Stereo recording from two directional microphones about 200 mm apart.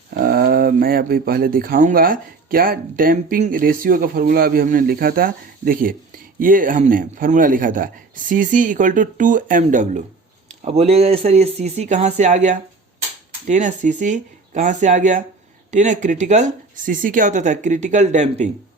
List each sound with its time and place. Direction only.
0.1 s speech: 45° right (ahead or behind)